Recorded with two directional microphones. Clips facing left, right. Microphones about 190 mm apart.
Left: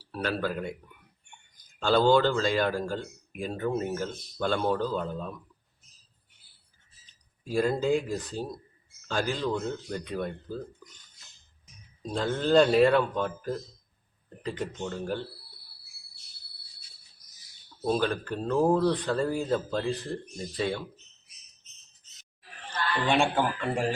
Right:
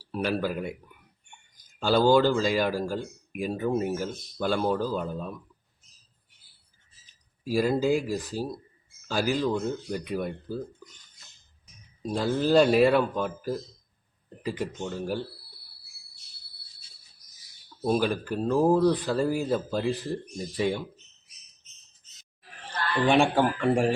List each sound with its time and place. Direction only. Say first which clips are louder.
0.1 s speech: right 2 dB; 15° right (ahead or behind)
1.8 s speech: right 1 dB; 10° right (ahead or behind)
7.4 s speech: right 2 dB; 5° right (ahead or behind)
12.0 s speech: right 2 dB; 10° right (ahead or behind)
17.8 s speech: right 2 dB; 10° right (ahead or behind)
23.0 s speech: right 4 dB; 15° right (ahead or behind)